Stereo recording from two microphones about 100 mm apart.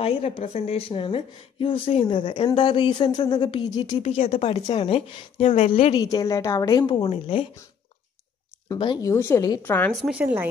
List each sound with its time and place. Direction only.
0.0 s a woman's voice: 75° left (ahead or behind)
2.1 s speech: 55° left (ahead or behind)
4.0 s a woman's voice: 85° left
5.9 s a woman's voice: 35° left (ahead or behind)
6.9 s speech: 70° left (ahead or behind)
8.7 s speech: 55° left (ahead or behind)
9.0 s a woman's voice: 30° left (ahead or behind)
10.1 s a woman's voice: 15° right (ahead or behind)